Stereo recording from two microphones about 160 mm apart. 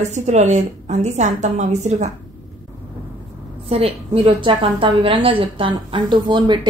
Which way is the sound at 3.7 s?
35° right (ahead or behind).